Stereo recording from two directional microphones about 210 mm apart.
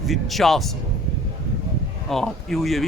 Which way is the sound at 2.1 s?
Centre (ahead or behind).